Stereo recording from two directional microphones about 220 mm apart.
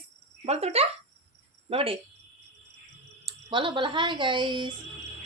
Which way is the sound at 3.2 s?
20° right (ahead or behind).